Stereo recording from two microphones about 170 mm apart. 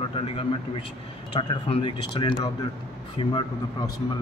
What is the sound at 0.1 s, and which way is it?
A man's voice, 30° left (ahead or behind).